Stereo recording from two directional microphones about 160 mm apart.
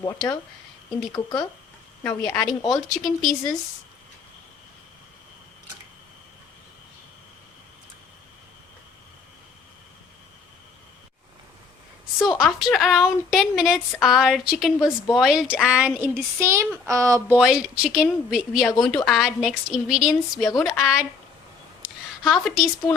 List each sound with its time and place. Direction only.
1.1 s speech: 25° left (ahead or behind)
2.0 s speech: 5° left (ahead or behind)
12.4 s speech: centre (ahead or behind)
14.8 s a woman's voice: 15° left (ahead or behind)
15.1 s a woman's voice: centre (ahead or behind); by 17.3 s 20° right (ahead or behind)
17.3 s speech: 5° right (ahead or behind)
21.8 s a sound: centre (ahead or behind)